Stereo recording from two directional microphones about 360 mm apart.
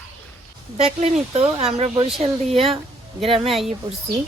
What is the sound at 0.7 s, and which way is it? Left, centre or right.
Speech, centre.